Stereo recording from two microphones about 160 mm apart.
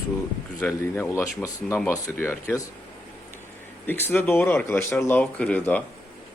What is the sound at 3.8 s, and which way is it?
Speech, 10° left (ahead or behind).